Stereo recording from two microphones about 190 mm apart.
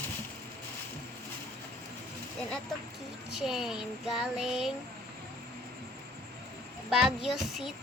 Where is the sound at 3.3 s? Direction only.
Centre (ahead or behind).